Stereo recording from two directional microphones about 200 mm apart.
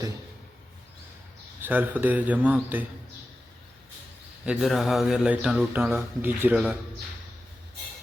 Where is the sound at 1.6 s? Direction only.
10° right (ahead or behind).